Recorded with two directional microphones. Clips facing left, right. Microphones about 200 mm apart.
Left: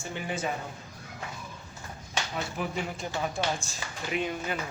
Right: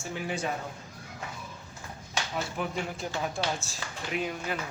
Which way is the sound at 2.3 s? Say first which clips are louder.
Right 1 dB; centre (ahead or behind).